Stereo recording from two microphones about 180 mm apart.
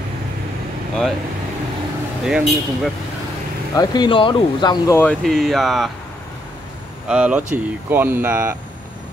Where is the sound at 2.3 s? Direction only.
5° right (ahead or behind).